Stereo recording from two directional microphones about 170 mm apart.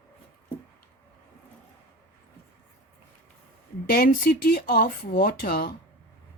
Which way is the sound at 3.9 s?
55° left (ahead or behind).